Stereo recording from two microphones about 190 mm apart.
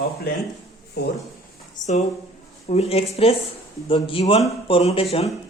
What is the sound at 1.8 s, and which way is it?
Speech, 40° left (ahead or behind).